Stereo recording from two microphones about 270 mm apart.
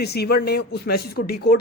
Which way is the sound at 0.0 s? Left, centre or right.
Left.